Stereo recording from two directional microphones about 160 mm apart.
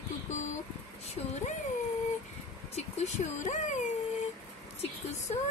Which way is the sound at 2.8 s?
45° left (ahead or behind).